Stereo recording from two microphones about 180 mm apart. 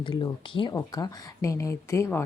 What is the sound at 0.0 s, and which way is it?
Speech, 25° left (ahead or behind).